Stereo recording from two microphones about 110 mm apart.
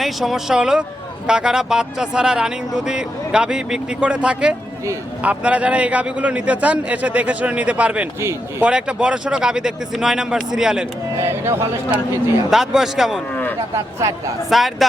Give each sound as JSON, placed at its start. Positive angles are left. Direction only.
{"t": 0.0, "sound": "speech", "side_deg": 0}
{"t": 8.2, "sound": "speech", "side_deg": -25}
{"t": 8.6, "sound": "speech", "side_deg": -10}
{"t": 11.2, "sound": "speech", "side_deg": -20}
{"t": 12.5, "sound": "speech", "side_deg": -5}
{"t": 13.7, "sound": "speech", "side_deg": -30}
{"t": 14.5, "sound": "speech", "side_deg": 0}